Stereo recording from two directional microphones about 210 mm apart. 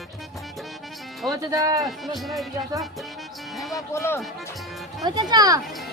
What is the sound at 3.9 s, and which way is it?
Speech, 15° left (ahead or behind).